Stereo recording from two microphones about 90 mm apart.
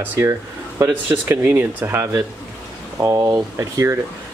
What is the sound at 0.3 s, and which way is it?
Speech, 40° right (ahead or behind).